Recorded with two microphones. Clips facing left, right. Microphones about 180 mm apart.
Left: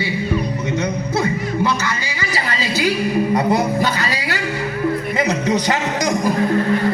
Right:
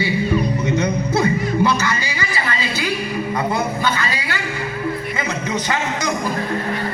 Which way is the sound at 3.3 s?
40° left (ahead or behind).